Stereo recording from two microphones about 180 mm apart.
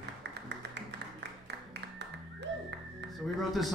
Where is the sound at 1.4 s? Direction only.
75° right (ahead or behind).